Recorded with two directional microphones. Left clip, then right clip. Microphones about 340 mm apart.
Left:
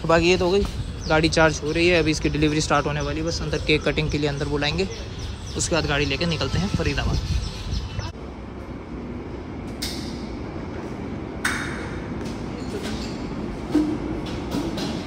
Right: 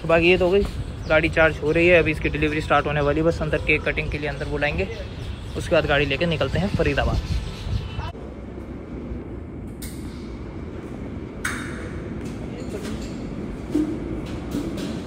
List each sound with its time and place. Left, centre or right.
0.1 s speech: centre